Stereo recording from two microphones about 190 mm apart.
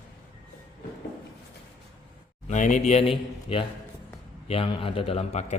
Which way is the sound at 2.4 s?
40° left (ahead or behind).